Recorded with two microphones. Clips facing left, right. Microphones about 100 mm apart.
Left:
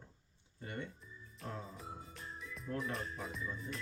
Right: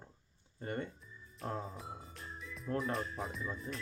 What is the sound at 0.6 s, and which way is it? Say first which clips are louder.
Speech: right 5 dB; 40° right (ahead or behind).